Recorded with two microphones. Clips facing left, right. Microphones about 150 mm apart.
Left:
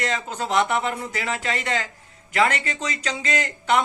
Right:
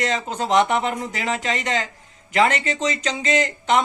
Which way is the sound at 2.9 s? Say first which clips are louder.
Right 4 dB; 20° right (ahead or behind).